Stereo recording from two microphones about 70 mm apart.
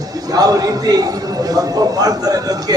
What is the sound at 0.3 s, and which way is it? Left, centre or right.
A man's voice, right.